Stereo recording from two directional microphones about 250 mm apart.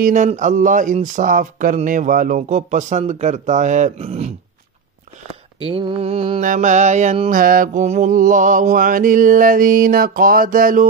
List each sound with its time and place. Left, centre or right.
0.0 s speech: right
5.7 s mantra: right